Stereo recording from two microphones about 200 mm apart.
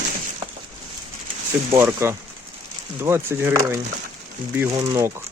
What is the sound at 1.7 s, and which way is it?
Speech, 10° right (ahead or behind).